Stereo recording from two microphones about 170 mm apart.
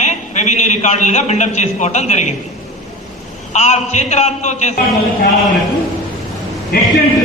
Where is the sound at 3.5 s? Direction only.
40° left (ahead or behind).